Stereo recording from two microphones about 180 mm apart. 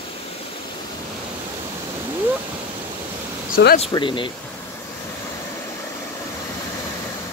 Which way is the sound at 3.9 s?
25° left (ahead or behind).